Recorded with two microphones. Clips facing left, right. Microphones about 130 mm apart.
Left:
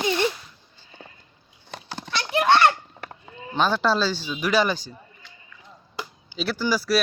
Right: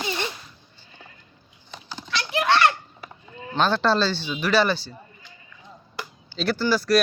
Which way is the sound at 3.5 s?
10° left (ahead or behind).